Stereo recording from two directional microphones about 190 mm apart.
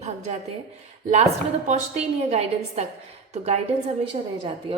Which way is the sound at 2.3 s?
35° right (ahead or behind).